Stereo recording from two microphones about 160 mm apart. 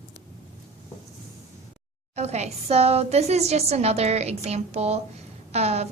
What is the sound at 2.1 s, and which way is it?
A woman's voice, 45° right (ahead or behind).